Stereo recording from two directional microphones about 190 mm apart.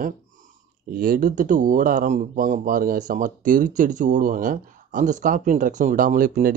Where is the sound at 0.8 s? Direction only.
50° right (ahead or behind).